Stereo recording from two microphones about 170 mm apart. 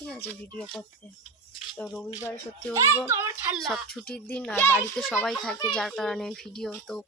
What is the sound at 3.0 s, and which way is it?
Speech, 15° right (ahead or behind).